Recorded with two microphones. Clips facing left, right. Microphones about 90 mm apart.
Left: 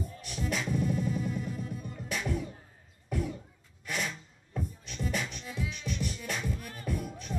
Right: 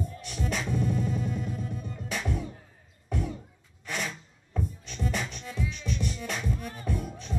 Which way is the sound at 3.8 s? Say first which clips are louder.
Right 1 dB; 35° right (ahead or behind).